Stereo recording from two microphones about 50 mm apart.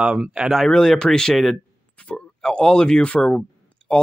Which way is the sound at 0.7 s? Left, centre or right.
Centre.